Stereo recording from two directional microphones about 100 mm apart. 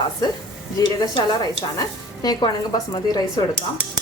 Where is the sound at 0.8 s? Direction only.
40° left (ahead or behind).